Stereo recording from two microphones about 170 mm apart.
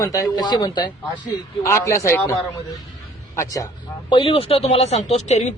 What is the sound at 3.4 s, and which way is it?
A man's voice, 20° left (ahead or behind).